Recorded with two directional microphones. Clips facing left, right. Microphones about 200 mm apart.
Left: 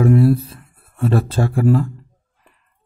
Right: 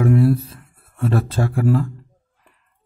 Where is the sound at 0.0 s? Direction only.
30° left (ahead or behind).